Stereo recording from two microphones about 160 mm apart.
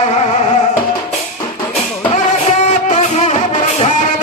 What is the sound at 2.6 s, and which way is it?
Music, 50° left (ahead or behind).